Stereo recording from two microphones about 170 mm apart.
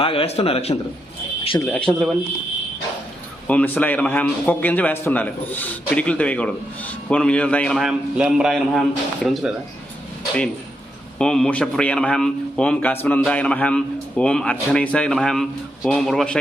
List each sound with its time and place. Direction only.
0.0 s a man's voice: 30° left (ahead or behind)
1.6 s a man's voice: 5° left (ahead or behind)
3.4 s a man's voice: 10° left (ahead or behind)
11.2 s a man's voice: 5° left (ahead or behind)